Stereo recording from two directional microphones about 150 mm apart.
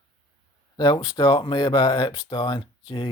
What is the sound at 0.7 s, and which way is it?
Speech, 30° left (ahead or behind).